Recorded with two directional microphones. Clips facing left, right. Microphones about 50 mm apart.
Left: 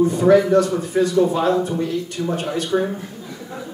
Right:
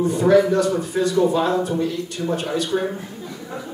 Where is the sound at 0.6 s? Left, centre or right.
Left.